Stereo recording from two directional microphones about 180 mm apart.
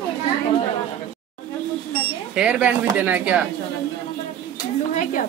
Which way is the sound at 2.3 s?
5° right (ahead or behind).